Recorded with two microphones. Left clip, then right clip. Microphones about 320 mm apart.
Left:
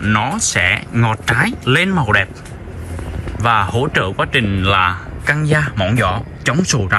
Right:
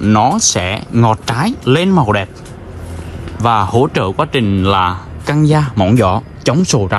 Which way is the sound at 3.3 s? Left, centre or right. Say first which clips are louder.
Right 3 dB; centre.